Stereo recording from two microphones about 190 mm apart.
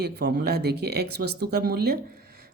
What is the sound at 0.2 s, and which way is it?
Speech, 60° right (ahead or behind).